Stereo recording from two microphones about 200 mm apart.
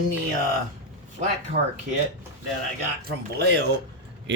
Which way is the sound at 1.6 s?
45° right (ahead or behind).